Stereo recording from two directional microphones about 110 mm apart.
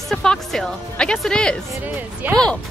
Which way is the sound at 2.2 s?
15° right (ahead or behind).